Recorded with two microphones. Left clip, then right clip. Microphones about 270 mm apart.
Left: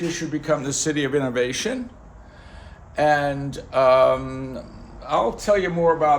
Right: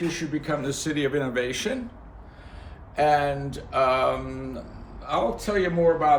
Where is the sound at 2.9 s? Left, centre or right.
Left.